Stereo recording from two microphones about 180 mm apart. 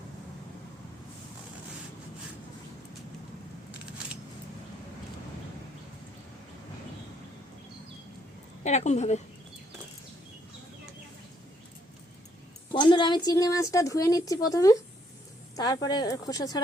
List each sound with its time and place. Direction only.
8.6 s a woman's voice: 40° left (ahead or behind)
12.7 s a woman's voice: 25° left (ahead or behind)